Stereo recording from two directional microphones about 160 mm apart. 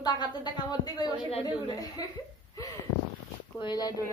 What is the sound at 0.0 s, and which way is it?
A woman's voice, 25° left (ahead or behind).